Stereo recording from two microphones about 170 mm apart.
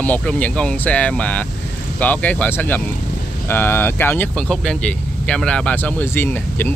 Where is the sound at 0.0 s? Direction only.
5° left (ahead or behind).